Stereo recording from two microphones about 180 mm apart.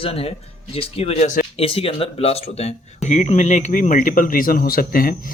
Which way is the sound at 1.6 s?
30° left (ahead or behind).